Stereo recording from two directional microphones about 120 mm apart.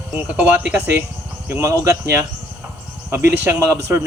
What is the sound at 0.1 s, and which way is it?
A man's voice, 10° right (ahead or behind).